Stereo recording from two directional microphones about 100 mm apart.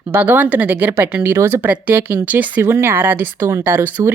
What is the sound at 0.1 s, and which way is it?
A woman's voice, 20° right (ahead or behind).